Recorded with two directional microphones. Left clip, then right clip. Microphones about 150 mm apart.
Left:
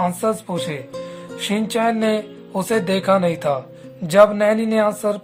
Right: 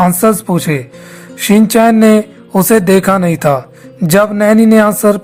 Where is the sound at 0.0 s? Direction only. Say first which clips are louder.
Right 10 dB; 40° right (ahead or behind).